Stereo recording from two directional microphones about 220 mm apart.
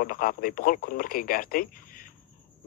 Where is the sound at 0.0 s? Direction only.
40° left (ahead or behind).